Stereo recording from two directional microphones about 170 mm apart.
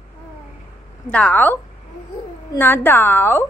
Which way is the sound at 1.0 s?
10° left (ahead or behind).